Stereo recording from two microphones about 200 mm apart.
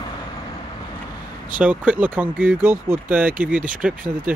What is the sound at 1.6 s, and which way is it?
Speech, 5° right (ahead or behind).